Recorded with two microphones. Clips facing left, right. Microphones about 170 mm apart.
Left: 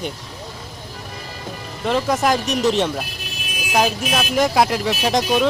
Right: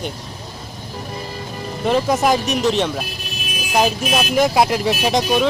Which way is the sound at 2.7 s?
5° left (ahead or behind).